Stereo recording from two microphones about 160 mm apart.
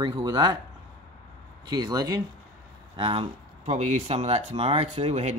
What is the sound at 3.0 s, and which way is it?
Speech, 35° right (ahead or behind).